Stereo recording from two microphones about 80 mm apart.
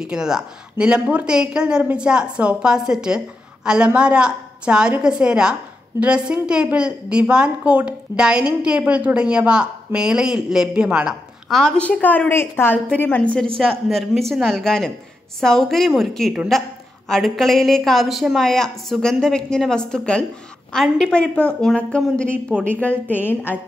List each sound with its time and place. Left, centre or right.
0.0 s a woman's voice: centre
11.4 s a woman's voice: centre
12.3 s a woman's voice: left; by 13.5 s centre
13.6 s a woman's voice: centre; by 23.6 s left